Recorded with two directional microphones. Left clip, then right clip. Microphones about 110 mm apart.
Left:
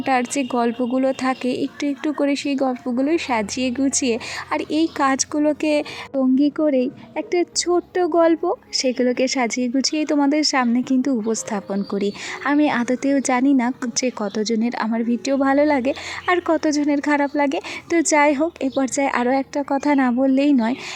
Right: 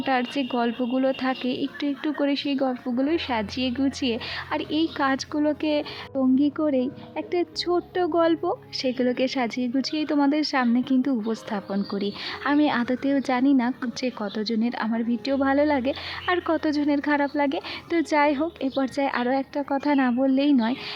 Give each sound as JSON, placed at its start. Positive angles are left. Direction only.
{"t": 0.0, "sound": "speech", "side_deg": 30}